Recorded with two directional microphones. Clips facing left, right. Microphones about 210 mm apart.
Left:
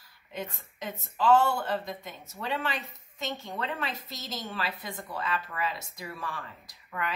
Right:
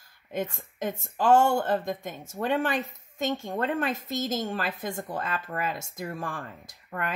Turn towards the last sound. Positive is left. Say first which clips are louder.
# right 2 dB
turn(degrees=-45)  # may be behind; listen again after turning